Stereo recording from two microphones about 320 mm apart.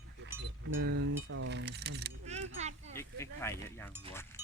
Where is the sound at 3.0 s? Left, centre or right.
Centre.